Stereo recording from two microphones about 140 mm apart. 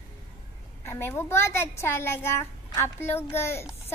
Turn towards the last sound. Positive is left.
turn(degrees=20)  # may be behind; listen again after turning